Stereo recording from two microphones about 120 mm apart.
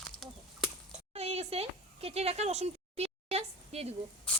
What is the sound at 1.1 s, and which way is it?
Speech, 65° right (ahead or behind).